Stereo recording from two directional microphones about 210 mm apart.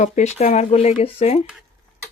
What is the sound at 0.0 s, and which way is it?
Speech, 35° left (ahead or behind).